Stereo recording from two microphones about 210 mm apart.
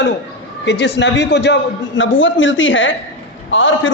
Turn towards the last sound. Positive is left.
turn(degrees=65)  # may be behind; listen again after turning